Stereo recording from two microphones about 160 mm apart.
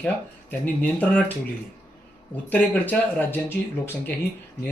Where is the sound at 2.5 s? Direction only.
10° left (ahead or behind).